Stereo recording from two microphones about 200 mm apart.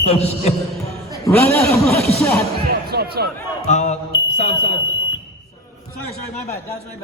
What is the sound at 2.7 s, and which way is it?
Music, 50° right (ahead or behind).